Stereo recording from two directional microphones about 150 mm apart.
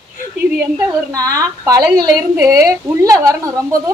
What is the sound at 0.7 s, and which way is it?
Speech, 25° right (ahead or behind).